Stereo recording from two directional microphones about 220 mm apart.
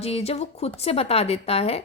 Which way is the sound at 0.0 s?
30° left (ahead or behind).